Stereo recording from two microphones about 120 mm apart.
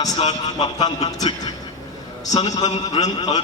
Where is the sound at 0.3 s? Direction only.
35° left (ahead or behind).